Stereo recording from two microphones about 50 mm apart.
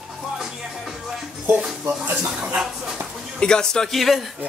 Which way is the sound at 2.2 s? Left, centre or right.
Right.